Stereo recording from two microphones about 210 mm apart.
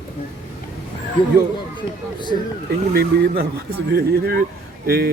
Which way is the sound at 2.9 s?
50° right (ahead or behind).